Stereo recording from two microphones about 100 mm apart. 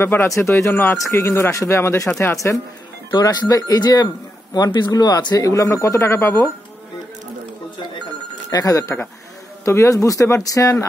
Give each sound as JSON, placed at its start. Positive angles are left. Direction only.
{"t": 0.0, "sound": "speech", "side_deg": 25}
{"t": 3.1, "sound": "speech", "side_deg": 45}
{"t": 8.5, "sound": "speech", "side_deg": 35}